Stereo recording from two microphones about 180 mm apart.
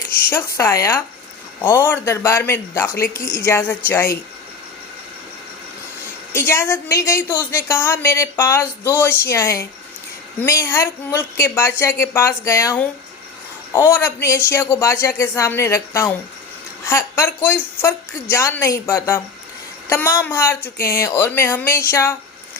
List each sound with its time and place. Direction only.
0.1 s a woman's voice: 10° left (ahead or behind)
6.3 s a woman's voice: 15° left (ahead or behind)
13.9 s a woman's voice: 15° left (ahead or behind)